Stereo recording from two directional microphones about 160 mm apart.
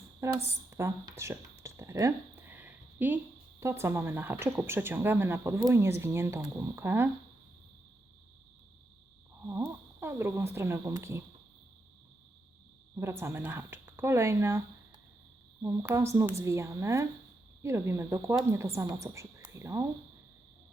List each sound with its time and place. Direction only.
0.2 s speech: 15° right (ahead or behind)
1.6 s a sound: 15° right (ahead or behind)
3.6 s speech: 15° right (ahead or behind)
9.5 s a sound: 15° right (ahead or behind)
13.0 s speech: 15° right (ahead or behind)
15.6 s speech: 15° right (ahead or behind)